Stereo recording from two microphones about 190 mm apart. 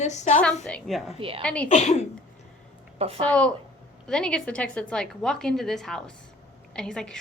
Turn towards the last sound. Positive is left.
turn(degrees=5)  # may be behind; listen again after turning